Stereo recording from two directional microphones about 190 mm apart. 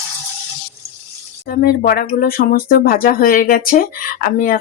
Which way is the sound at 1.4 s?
50° left (ahead or behind).